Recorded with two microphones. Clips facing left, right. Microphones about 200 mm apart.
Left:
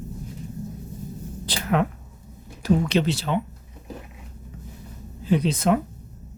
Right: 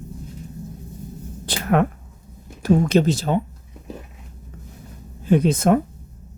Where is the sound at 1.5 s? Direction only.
50° right (ahead or behind).